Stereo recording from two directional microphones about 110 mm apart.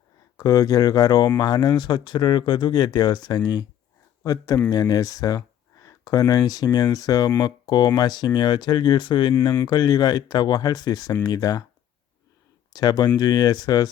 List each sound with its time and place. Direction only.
0.3 s speech: 35° left (ahead or behind)
12.7 s speech: 40° left (ahead or behind)